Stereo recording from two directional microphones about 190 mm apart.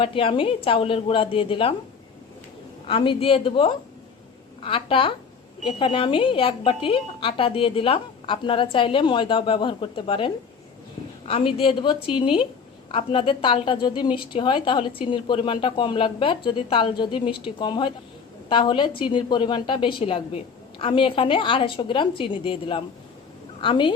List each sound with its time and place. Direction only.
0.0 s a woman's voice: 30° left (ahead or behind)
2.8 s a woman's voice: 25° left (ahead or behind)